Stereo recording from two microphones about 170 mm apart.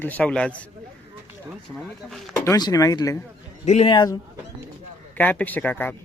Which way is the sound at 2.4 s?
20° left (ahead or behind).